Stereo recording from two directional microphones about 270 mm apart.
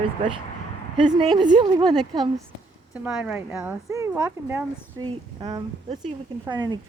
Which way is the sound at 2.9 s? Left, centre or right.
Centre.